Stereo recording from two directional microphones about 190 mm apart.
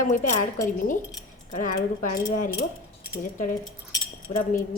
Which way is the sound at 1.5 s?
45° left (ahead or behind).